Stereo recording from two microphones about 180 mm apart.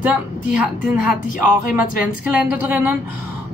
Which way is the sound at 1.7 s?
5° right (ahead or behind).